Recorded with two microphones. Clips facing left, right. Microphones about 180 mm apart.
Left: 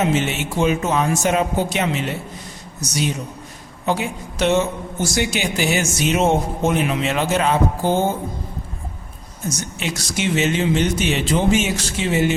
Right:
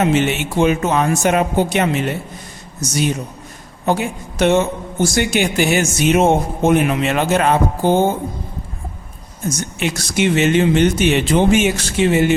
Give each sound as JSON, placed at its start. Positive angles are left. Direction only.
{"t": 0.0, "sound": "a woman's voice", "side_deg": -60}
{"t": 9.8, "sound": "a woman's voice", "side_deg": -60}